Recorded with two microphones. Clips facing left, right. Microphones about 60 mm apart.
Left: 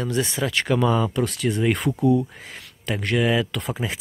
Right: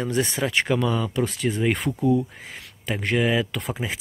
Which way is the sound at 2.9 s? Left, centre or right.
Centre.